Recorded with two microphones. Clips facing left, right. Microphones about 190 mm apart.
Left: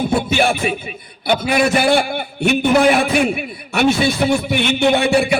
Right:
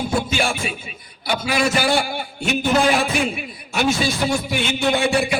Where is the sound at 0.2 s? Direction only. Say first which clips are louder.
Left 5 dB; 60° left (ahead or behind).